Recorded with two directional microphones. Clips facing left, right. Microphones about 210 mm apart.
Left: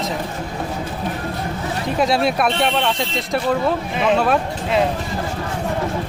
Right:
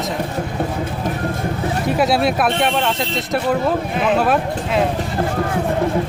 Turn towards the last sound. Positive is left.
turn(degrees=0)  # may be behind; listen again after turning